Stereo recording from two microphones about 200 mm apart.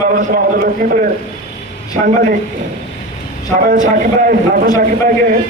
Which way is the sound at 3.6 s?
45° right (ahead or behind).